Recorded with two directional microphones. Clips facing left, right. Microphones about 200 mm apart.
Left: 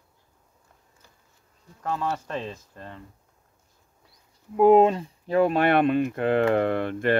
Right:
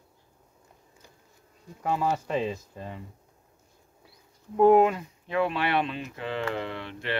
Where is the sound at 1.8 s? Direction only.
10° right (ahead or behind).